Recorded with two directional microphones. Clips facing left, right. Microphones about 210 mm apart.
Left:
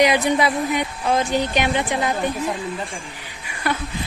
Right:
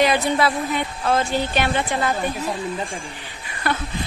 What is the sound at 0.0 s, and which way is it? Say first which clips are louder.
Speech: left 1 dB; 15° left (ahead or behind).